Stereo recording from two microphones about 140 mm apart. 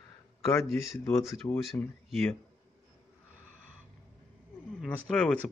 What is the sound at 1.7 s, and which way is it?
Speech, 15° left (ahead or behind).